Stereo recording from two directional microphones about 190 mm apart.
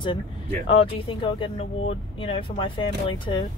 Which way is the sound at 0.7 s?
30° left (ahead or behind).